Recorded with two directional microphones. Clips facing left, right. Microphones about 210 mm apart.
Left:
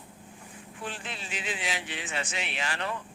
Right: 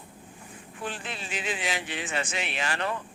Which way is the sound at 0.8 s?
50° right (ahead or behind).